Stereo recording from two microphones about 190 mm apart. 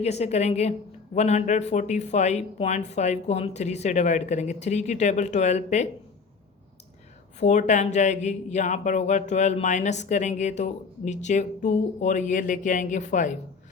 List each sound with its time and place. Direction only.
0.0 s speech: 35° left (ahead or behind)
7.3 s speech: 40° left (ahead or behind)